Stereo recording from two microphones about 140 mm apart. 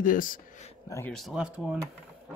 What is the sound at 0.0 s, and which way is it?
Speech, 80° left.